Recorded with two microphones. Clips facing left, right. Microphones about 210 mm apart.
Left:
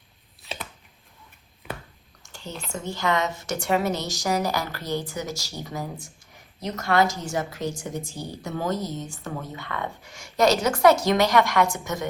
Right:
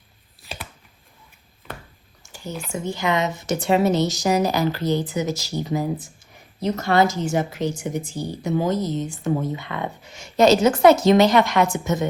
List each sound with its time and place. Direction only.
2.3 s a woman's voice: 10° right (ahead or behind); by 12.0 s 25° right (ahead or behind)